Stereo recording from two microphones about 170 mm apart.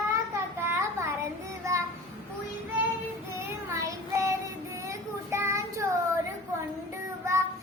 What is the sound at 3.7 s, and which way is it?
Child singing, 20° right (ahead or behind).